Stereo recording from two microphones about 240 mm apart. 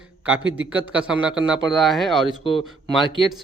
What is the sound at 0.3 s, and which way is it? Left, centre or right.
Speech, centre.